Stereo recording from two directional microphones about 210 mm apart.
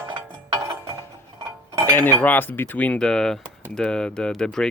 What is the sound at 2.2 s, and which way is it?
Speech, 10° left (ahead or behind).